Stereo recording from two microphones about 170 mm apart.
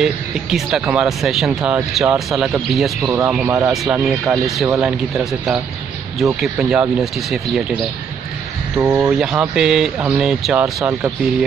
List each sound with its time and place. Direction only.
0.0 s speech: 5° right (ahead or behind)
3.1 s speech: 15° right (ahead or behind)
3.7 s speech: centre (ahead or behind)
8.7 s speech: 15° right (ahead or behind)